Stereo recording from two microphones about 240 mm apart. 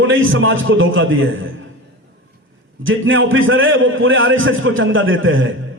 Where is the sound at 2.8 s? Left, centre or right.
Right.